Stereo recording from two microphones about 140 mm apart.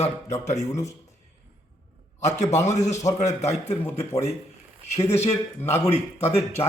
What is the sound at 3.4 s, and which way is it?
Speech, 50° left (ahead or behind).